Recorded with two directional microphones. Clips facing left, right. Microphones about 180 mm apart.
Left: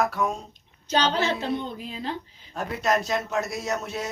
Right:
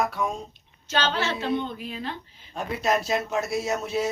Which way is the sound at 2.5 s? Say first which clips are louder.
Even; centre (ahead or behind).